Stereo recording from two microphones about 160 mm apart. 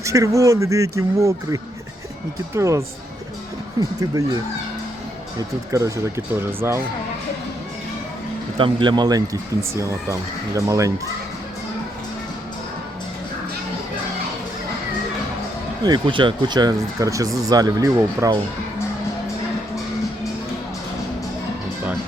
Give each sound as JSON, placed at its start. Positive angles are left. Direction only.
{"t": 0.0, "sound": "speech", "side_deg": -20}
{"t": 2.6, "sound": "speech", "side_deg": -20}
{"t": 5.4, "sound": "speech", "side_deg": -20}
{"t": 8.5, "sound": "speech", "side_deg": -30}
{"t": 15.8, "sound": "speech", "side_deg": -30}